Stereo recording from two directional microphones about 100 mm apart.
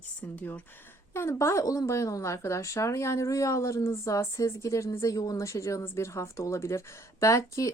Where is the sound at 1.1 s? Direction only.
25° left (ahead or behind).